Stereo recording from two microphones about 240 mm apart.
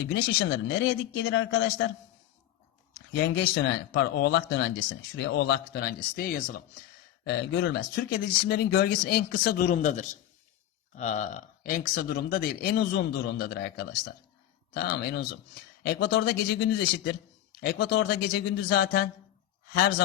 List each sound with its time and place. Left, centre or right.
1.1 s speech: left
3.2 s speech: left